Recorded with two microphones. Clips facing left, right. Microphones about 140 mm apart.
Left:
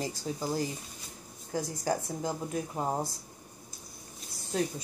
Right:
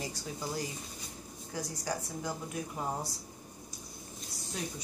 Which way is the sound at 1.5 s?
45° left (ahead or behind).